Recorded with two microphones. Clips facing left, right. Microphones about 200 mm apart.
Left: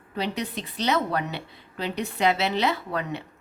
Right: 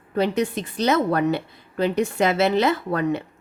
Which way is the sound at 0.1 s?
50° right (ahead or behind).